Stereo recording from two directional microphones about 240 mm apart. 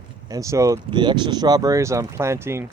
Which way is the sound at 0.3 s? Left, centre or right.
Centre.